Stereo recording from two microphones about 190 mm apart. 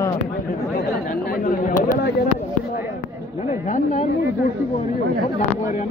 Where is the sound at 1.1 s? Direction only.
50° left (ahead or behind).